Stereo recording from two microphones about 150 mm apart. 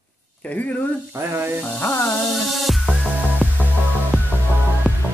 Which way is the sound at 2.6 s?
Centre (ahead or behind).